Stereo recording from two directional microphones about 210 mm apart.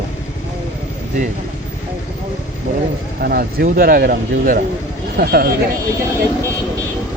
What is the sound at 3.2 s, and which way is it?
Speech, 45° right (ahead or behind).